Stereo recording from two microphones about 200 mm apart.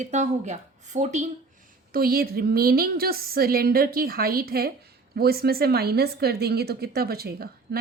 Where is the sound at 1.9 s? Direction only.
45° right (ahead or behind).